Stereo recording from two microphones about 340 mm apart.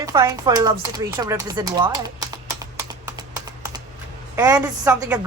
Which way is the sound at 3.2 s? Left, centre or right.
Centre.